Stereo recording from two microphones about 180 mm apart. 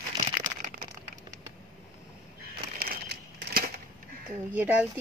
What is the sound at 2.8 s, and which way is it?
Crumpling, 55° right (ahead or behind).